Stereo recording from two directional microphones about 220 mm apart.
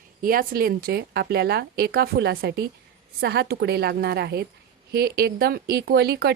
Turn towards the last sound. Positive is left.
turn(degrees=-50)  # may be behind; listen again after turning